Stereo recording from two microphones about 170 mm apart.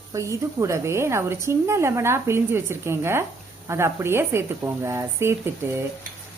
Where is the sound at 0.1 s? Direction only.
20° right (ahead or behind).